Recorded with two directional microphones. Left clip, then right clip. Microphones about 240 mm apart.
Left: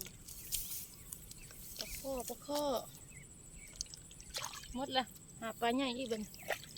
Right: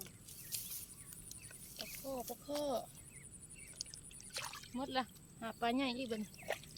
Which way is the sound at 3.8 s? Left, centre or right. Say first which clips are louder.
Left 3 dB; centre.